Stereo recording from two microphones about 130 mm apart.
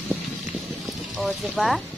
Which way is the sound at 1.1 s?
Centre (ahead or behind).